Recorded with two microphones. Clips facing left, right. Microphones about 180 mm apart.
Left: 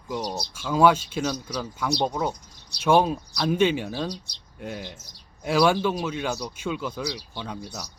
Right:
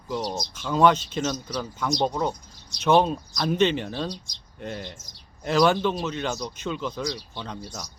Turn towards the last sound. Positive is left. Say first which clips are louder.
# left 1 dB
turn(degrees=10)  # may be behind; listen again after turning